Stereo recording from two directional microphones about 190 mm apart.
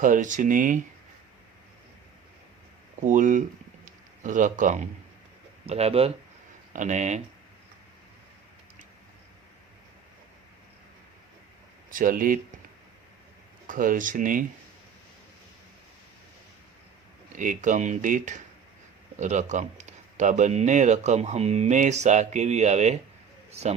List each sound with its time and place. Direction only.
0.0 s speech: 45° right (ahead or behind)
3.0 s a man's voice: 45° right (ahead or behind)
11.9 s speech: 45° right (ahead or behind)
13.7 s speech: 45° right (ahead or behind)
17.3 s speech: 40° right (ahead or behind)